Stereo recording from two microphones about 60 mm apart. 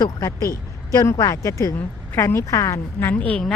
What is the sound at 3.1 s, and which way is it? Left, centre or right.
Speech, left.